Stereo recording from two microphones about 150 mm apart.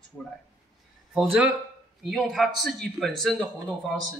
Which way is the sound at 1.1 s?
5° right (ahead or behind).